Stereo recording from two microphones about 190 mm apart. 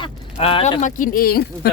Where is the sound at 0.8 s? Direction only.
45° left (ahead or behind).